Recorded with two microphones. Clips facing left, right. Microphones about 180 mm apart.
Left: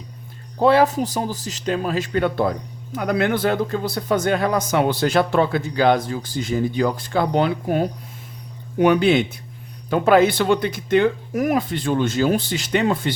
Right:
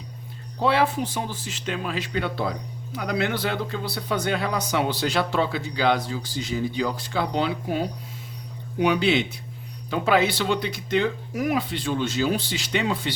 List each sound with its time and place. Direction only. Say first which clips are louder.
0.6 s speech: left 6 dB; 40° left (ahead or behind)